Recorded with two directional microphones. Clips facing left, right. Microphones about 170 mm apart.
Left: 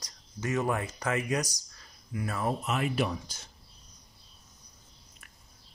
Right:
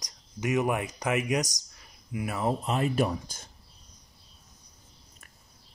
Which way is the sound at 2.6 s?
35° right (ahead or behind).